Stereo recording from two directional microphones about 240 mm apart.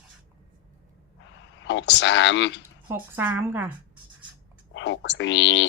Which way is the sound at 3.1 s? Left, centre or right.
Centre.